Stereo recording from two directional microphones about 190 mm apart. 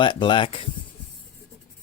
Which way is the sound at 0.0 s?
25° left (ahead or behind).